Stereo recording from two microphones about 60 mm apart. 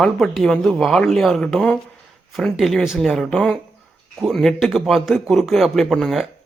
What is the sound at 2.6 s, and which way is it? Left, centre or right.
A man's voice, centre.